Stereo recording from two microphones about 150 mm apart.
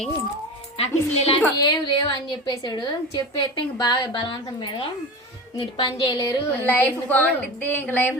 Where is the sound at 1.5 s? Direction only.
30° left (ahead or behind).